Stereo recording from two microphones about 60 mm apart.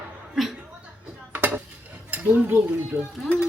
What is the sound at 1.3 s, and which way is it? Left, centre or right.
Cutlery, right.